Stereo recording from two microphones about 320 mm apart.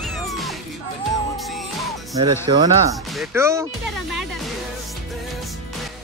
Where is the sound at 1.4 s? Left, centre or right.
Centre.